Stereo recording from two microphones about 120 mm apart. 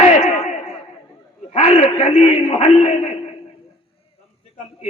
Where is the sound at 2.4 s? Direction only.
55° left (ahead or behind).